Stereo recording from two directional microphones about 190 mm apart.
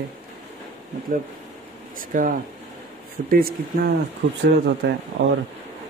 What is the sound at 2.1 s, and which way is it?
Speech, 45° right (ahead or behind).